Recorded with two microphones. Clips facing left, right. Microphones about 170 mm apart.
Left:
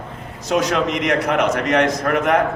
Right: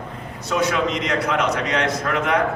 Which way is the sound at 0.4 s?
85° left.